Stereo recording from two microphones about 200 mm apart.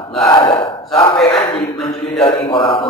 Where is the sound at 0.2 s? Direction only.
25° left (ahead or behind).